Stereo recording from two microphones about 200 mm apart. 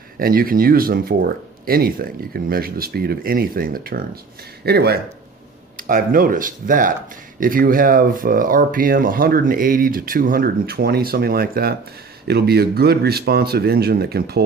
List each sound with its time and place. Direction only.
0.2 s speech: 45° right (ahead or behind)